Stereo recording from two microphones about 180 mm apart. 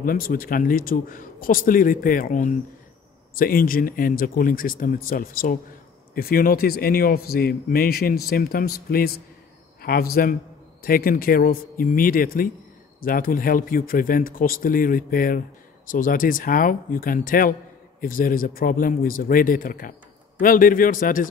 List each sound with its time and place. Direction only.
0.0 s speech: 55° left (ahead or behind)